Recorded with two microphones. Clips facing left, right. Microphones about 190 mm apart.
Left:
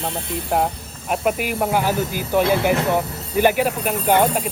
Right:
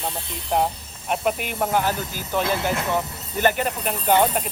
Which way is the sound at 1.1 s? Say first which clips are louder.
Left 3 dB; 5° left (ahead or behind).